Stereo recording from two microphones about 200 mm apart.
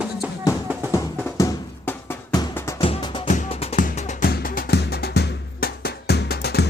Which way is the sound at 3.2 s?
40° left (ahead or behind).